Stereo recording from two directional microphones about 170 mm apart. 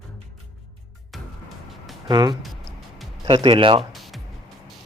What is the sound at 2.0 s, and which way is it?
Speech, 25° right (ahead or behind).